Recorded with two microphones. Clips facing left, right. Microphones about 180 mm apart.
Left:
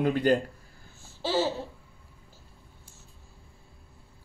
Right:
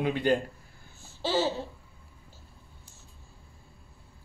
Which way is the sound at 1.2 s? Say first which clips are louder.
Even; 10° left (ahead or behind).